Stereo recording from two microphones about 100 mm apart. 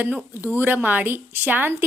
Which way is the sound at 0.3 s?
20° right (ahead or behind).